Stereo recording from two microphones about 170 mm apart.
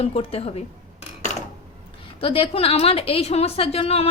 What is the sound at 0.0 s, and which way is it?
Speech, 35° left (ahead or behind).